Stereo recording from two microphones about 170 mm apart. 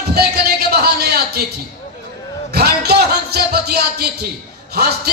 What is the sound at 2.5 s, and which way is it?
Music, 70° right (ahead or behind).